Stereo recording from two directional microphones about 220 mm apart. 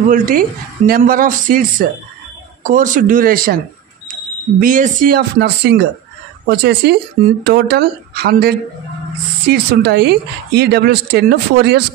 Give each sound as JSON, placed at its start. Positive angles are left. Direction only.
{"t": 0.1, "sound": "speech", "side_deg": -40}
{"t": 4.6, "sound": "speech", "side_deg": -35}